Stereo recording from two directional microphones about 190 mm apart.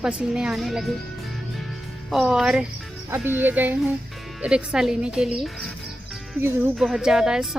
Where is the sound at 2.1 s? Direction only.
Centre (ahead or behind).